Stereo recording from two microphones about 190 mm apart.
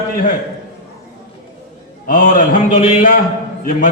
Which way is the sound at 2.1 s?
45° left (ahead or behind).